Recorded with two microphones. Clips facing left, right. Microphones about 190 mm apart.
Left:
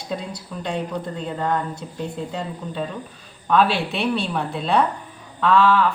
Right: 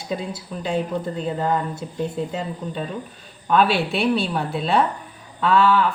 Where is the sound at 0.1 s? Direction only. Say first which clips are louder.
Right 2 dB; 5° right (ahead or behind).